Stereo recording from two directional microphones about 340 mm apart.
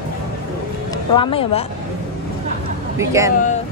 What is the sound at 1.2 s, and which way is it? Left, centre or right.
Speech, centre.